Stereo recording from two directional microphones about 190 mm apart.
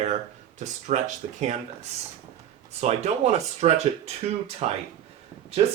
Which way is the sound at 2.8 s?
35° right (ahead or behind).